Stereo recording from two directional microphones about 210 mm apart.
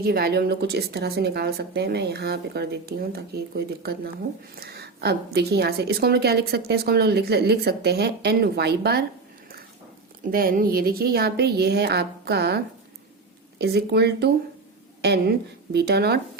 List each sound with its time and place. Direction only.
0.0 s a woman's voice: 45° right (ahead or behind)
10.3 s a woman's voice: 45° right (ahead or behind)